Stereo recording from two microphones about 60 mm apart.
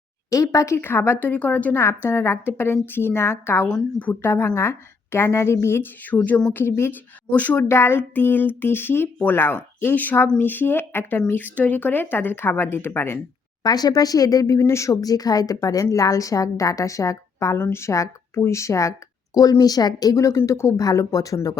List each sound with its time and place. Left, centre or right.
0.3 s speech: left
0.8 s a woman's voice: left
1.8 s a woman's voice: left
6.1 s speech: left
6.5 s a woman's voice: left
6.9 s a woman's voice: left
7.7 s a woman's voice: left
13.6 s speech: left
14.6 s a woman's voice: left
15.0 s a woman's voice: left
17.6 s speech: left
20.8 s a woman's voice: left